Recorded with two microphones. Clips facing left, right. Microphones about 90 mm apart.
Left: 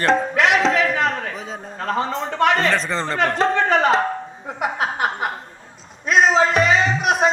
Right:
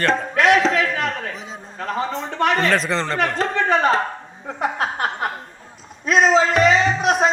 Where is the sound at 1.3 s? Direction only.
40° left (ahead or behind).